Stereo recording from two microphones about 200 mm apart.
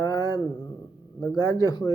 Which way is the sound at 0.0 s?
20° left (ahead or behind).